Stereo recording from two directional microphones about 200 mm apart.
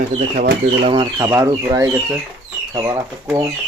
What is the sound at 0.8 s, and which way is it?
Speech, 25° right (ahead or behind).